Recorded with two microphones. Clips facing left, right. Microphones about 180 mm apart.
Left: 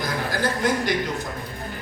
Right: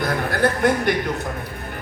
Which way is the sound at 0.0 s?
60° right (ahead or behind).